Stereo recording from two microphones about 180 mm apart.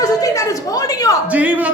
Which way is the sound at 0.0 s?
20° left (ahead or behind).